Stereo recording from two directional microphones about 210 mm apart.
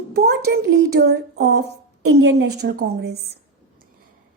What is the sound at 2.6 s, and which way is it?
Speech, 50° right (ahead or behind).